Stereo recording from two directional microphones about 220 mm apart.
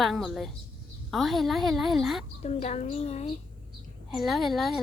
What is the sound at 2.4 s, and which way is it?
Speech, 30° left (ahead or behind).